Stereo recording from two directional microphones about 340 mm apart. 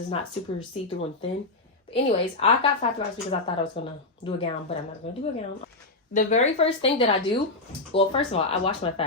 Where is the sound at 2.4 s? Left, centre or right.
Centre.